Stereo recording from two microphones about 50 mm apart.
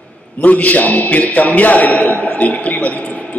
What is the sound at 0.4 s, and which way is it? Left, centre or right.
A man's voice, left.